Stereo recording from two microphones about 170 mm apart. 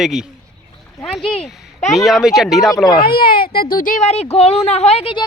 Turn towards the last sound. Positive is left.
turn(degrees=35)  # may be behind; listen again after turning